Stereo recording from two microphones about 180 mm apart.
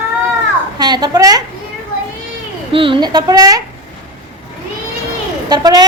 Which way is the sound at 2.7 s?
30° right (ahead or behind).